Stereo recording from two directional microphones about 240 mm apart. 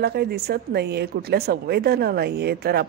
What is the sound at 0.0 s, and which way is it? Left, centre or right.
Speech, right.